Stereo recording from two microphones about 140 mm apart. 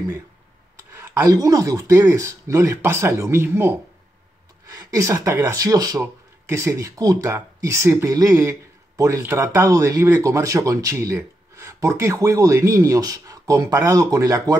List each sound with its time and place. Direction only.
0.9 s speech: 20° right (ahead or behind)